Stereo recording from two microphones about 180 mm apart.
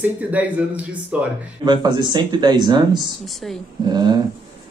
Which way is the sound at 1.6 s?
25° right (ahead or behind).